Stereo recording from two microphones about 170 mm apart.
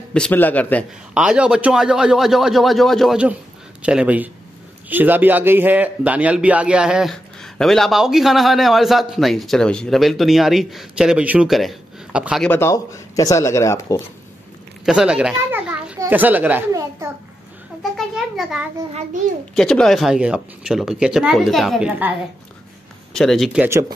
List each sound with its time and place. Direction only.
0.1 s speech: 10° left (ahead or behind)
1.1 s a man's voice: 5° right (ahead or behind)
12.4 s speech: 15° left (ahead or behind)
14.9 s children playing: 5° right (ahead or behind)
16.0 s a child's voice: 10° right (ahead or behind)
17.9 s a sound: centre (ahead or behind)
19.5 s a man's voice: 5° left (ahead or behind)
23.1 s a man's voice: centre (ahead or behind)